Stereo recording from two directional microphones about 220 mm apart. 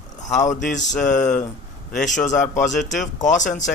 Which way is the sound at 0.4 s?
35° left (ahead or behind).